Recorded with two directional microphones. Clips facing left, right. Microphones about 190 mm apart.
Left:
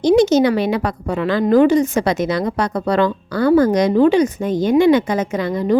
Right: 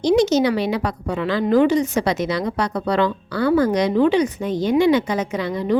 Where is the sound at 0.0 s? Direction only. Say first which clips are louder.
Left 4 dB; 50° left (ahead or behind).